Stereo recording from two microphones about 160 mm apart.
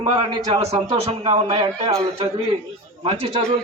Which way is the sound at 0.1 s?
25° right (ahead or behind).